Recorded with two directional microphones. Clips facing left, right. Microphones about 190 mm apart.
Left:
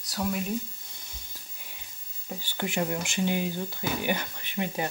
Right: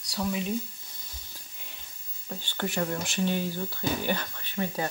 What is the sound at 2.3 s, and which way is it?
Speech, 10° left (ahead or behind).